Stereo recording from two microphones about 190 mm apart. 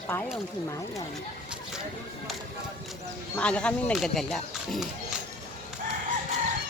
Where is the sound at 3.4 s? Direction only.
5° left (ahead or behind).